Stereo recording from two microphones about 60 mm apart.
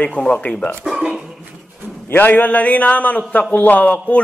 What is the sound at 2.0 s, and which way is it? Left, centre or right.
A man's voice, left.